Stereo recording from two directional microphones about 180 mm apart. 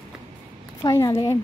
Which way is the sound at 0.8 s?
20° left (ahead or behind).